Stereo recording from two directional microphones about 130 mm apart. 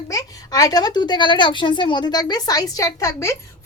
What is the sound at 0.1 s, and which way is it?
A woman's voice, 30° left (ahead or behind).